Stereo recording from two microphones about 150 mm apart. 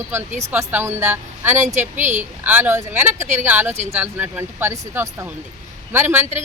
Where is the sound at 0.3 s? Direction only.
50° right (ahead or behind).